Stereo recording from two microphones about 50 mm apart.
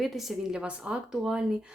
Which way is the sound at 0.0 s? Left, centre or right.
Centre.